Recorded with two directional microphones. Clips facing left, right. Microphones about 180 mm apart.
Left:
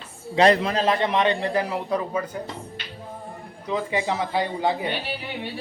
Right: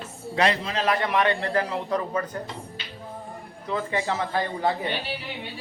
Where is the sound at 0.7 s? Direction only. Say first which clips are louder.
Left 2 dB; 25° left (ahead or behind); by 2.4 s 10° left (ahead or behind).